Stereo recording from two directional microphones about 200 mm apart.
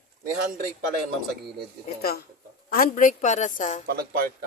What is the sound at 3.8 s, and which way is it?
Speech, 50° right (ahead or behind).